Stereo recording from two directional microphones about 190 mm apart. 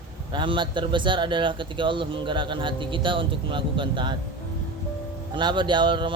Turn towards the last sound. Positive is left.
turn(degrees=-25)  # may be behind; listen again after turning